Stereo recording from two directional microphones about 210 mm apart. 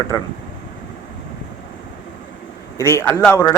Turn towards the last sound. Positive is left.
turn(degrees=10)  # may be behind; listen again after turning